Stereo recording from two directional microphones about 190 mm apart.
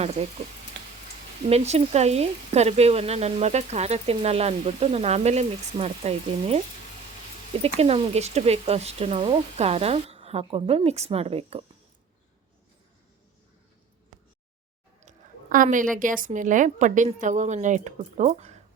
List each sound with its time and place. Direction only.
0.0 s speech: 35° right (ahead or behind)
1.5 s speech: 35° right (ahead or behind)
7.6 s speech: 30° right (ahead or behind)
15.0 s speech: 45° right (ahead or behind)